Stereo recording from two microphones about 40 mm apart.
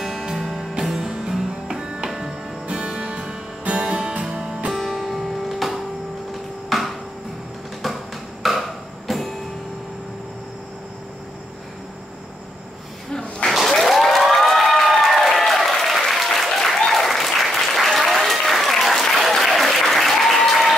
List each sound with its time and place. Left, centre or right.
0.0 s music: centre
2.6 s music: right
4.2 s music: centre
4.7 s music: centre
6.7 s a sound: centre
7.8 s music: centre
13.5 s applause: centre